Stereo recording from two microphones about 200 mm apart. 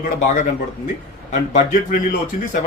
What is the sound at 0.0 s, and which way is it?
Speech, 40° left (ahead or behind).